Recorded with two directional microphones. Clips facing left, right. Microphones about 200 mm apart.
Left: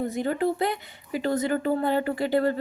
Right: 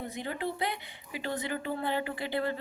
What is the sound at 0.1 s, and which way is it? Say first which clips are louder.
A woman's voice: left 10 dB; 45° left (ahead or behind).